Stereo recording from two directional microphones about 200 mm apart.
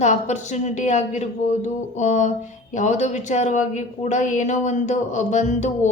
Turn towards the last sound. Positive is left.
turn(degrees=35)  # may be behind; listen again after turning